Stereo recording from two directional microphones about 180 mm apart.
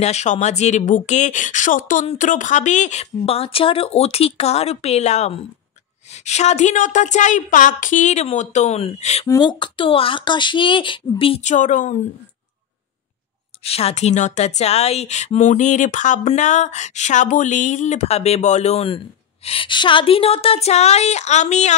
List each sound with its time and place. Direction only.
0.0 s speech: 40° left (ahead or behind)
9.3 s speech: 25° left (ahead or behind); by 12.0 s 45° left (ahead or behind)
13.7 s speech: 35° left (ahead or behind)